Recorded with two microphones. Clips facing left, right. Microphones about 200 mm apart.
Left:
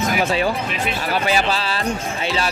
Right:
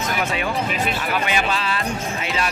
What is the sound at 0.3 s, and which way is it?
Speech, 30° left (ahead or behind).